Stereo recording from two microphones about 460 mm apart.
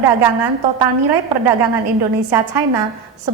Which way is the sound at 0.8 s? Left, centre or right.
Right.